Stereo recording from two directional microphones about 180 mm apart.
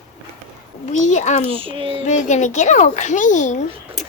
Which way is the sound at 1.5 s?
30° right (ahead or behind).